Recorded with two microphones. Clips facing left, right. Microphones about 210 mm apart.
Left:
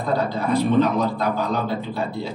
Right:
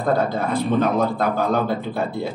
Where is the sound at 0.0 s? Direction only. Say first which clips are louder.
Right 2 dB; 50° right (ahead or behind).